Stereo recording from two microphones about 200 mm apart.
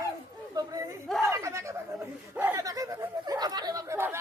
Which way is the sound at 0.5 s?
15° right (ahead or behind).